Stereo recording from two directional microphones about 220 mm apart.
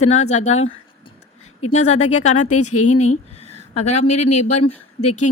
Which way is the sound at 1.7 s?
30° left (ahead or behind).